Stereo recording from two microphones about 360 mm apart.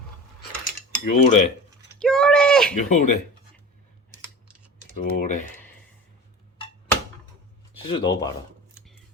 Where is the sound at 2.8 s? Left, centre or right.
Centre.